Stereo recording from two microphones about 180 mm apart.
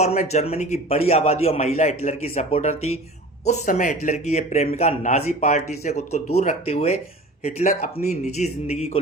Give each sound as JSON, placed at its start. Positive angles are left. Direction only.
{"t": 0.0, "sound": "speech", "side_deg": 40}